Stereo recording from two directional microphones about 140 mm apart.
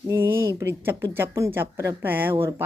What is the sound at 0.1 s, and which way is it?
Speech, 15° right (ahead or behind).